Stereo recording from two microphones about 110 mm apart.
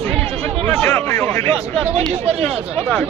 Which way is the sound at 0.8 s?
25° left (ahead or behind).